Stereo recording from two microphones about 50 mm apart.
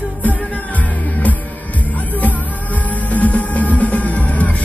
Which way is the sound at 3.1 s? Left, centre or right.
Left.